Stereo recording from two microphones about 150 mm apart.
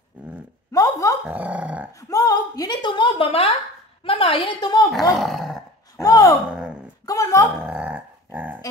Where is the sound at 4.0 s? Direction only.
40° left (ahead or behind).